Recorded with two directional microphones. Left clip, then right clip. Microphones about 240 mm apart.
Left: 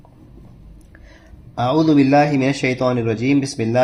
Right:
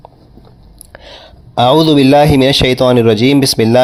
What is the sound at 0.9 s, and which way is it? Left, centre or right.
Speech, right.